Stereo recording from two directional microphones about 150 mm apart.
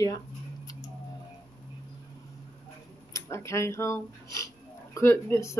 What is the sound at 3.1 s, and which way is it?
Speech, 20° left (ahead or behind).